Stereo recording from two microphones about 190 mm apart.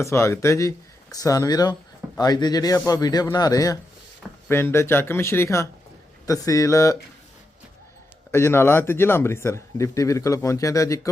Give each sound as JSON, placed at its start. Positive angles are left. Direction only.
{"t": 0.0, "sound": "a man's voice", "side_deg": 15}
{"t": 8.3, "sound": "a man's voice", "side_deg": 15}